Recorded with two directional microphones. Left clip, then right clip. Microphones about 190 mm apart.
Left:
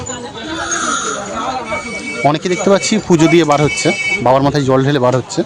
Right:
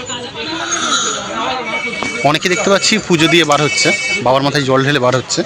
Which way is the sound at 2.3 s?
20° left (ahead or behind).